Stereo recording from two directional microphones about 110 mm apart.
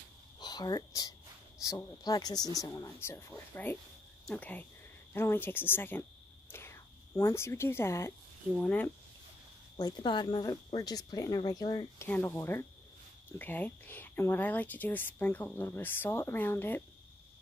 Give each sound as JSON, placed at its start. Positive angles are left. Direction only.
{"t": 0.4, "sound": "a sound", "side_deg": 40}
{"t": 2.0, "sound": "speech", "side_deg": 35}
{"t": 9.8, "sound": "speech", "side_deg": 35}
{"t": 12.3, "sound": "speech", "side_deg": 25}